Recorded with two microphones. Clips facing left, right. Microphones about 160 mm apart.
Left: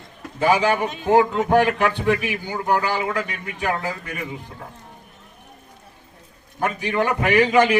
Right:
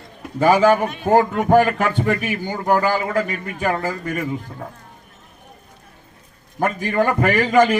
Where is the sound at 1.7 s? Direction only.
45° right (ahead or behind).